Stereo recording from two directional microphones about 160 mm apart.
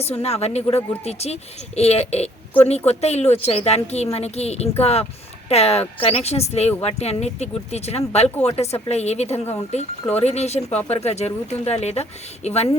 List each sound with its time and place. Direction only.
0.0 s a woman's voice: 40° left (ahead or behind)